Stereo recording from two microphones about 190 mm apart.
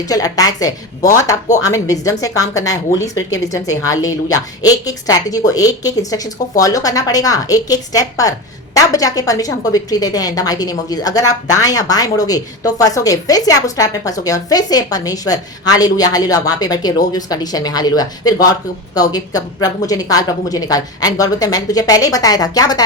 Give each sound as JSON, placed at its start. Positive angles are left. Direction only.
{"t": 0.0, "sound": "speech", "side_deg": 20}